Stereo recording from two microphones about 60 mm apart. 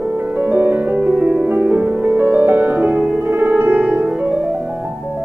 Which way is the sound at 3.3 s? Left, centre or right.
Right.